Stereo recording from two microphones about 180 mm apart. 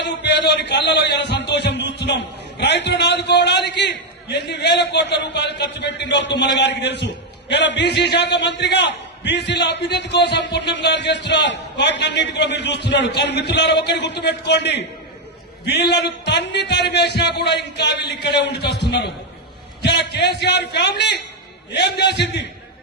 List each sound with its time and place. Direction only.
0.0 s a man's voice: 75° left (ahead or behind)